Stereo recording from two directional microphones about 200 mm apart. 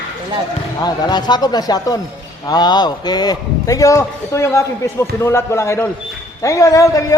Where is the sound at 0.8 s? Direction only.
20° left (ahead or behind).